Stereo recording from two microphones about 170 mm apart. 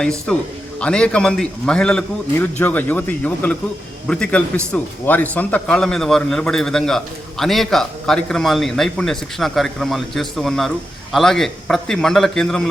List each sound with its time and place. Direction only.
0.3 s a man's voice: 5° left (ahead or behind)